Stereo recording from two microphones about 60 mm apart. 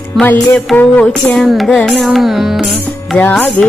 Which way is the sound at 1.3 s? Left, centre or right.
Centre.